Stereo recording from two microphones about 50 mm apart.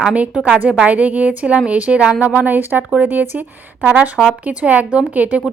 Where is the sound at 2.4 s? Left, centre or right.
Right.